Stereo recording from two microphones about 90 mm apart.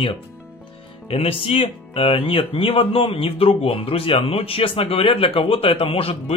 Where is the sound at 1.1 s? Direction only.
90° left.